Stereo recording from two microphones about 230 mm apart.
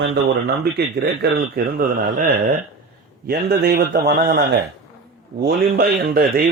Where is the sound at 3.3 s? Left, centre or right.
Right.